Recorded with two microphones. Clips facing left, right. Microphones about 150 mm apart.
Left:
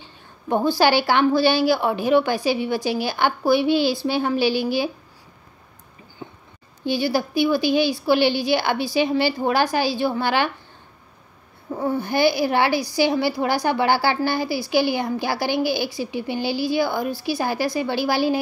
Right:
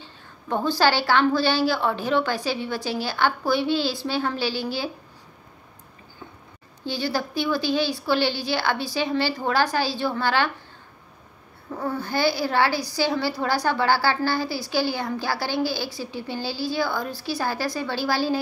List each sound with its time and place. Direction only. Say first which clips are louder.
0.0 s a woman's voice: left 4 dB; 15° left (ahead or behind)
6.2 s a sound: left 5 dB; 20° left (ahead or behind)
6.8 s a woman's voice: left 5 dB; 15° left (ahead or behind)
11.7 s a woman's voice: left 4 dB; 20° left (ahead or behind)